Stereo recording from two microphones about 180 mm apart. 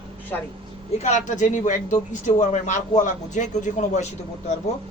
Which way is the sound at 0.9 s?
40° left (ahead or behind).